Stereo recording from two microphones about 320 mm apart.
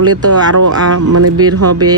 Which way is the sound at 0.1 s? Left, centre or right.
Right.